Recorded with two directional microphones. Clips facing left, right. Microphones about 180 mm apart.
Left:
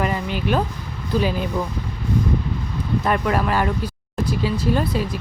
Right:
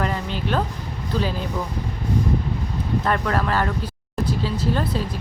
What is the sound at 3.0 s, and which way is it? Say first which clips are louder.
Speech: left 2 dB; 10° left (ahead or behind).